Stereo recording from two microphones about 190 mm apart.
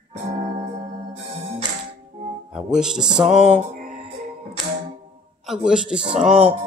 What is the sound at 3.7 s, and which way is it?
Music, 50° right (ahead or behind).